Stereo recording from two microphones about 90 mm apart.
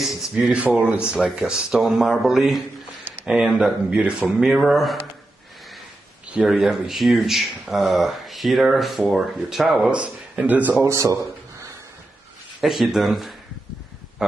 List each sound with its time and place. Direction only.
0.0 s speech: centre (ahead or behind)
0.6 s speech: 15° right (ahead or behind)
6.4 s speech: 5° right (ahead or behind)
9.8 s speech: 15° right (ahead or behind)
10.9 s speech: 40° right (ahead or behind)
12.5 s speech: 5° right (ahead or behind)